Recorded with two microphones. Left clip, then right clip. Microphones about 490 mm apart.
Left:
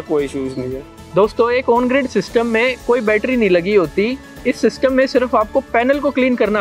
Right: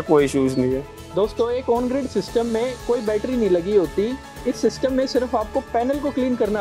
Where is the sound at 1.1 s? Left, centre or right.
Left.